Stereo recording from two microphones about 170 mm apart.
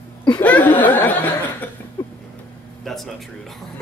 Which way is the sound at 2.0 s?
20° left (ahead or behind).